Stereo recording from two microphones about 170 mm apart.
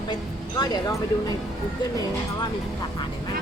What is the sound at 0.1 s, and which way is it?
Speech, 25° left (ahead or behind).